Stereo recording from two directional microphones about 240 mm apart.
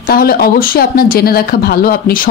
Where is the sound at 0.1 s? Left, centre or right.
Left.